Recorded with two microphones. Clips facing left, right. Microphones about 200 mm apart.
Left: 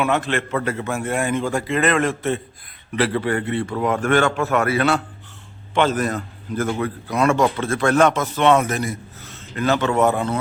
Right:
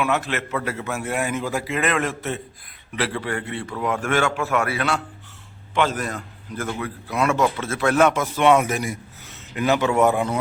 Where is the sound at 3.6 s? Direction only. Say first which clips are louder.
Left 4 dB; 45° left (ahead or behind).